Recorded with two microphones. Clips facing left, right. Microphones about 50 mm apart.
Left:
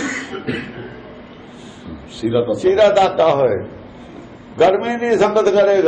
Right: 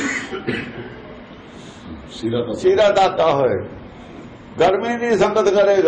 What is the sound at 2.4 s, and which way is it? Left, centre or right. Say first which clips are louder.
Speech: left 1 dB; left.